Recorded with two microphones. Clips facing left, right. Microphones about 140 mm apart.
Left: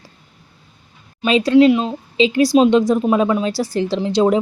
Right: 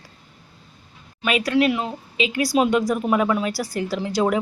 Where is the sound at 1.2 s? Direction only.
25° left (ahead or behind).